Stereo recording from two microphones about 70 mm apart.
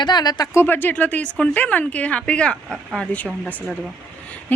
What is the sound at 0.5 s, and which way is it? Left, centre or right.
Speech, left.